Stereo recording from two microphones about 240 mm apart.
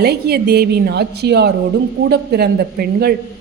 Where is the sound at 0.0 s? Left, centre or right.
Right.